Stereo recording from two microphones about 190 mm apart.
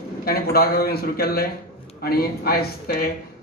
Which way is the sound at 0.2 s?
55° left (ahead or behind).